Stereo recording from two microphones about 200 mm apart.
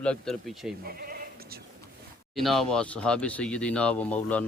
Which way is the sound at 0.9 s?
50° right (ahead or behind).